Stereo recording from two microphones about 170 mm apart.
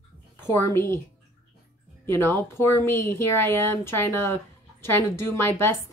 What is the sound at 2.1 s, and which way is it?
Speech, 15° left (ahead or behind).